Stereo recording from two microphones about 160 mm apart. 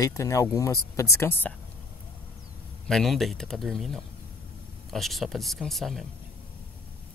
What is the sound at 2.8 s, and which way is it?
Speech, centre (ahead or behind).